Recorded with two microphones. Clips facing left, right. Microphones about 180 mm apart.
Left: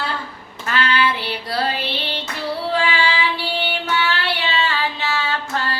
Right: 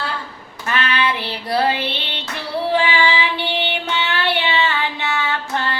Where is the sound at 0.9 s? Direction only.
20° right (ahead or behind).